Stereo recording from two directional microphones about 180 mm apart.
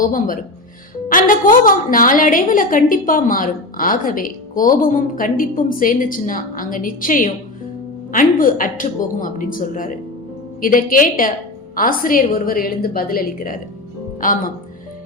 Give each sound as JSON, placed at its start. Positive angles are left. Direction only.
{"t": 0.0, "sound": "a woman's voice", "side_deg": 50}